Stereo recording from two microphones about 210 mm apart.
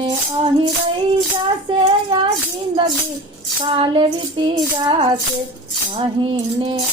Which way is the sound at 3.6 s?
25° right (ahead or behind).